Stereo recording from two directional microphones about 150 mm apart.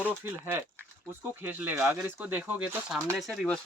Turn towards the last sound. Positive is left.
turn(degrees=0)  # may be behind; listen again after turning